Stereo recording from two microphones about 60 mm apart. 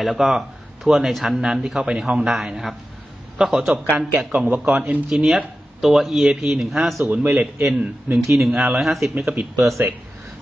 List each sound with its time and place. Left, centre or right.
0.0 s speech: centre
3.9 s speech: right
5.2 s speech: centre
7.1 s a man's voice: right
7.7 s speech: right
8.7 s a man's voice: centre
9.6 s speech: right